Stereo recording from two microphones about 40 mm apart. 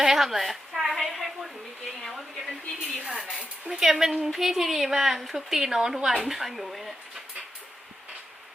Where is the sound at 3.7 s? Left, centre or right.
Centre.